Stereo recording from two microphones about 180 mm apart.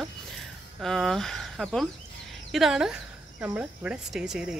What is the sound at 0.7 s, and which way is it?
Speech, centre (ahead or behind).